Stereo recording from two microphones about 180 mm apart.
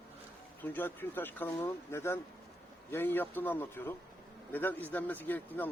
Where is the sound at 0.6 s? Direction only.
10° left (ahead or behind).